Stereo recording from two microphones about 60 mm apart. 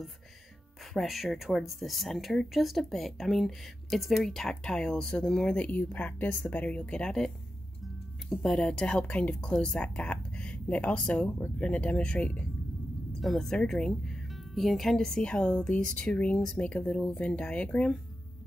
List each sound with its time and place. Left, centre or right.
0.9 s speech: centre
13.2 s speech: centre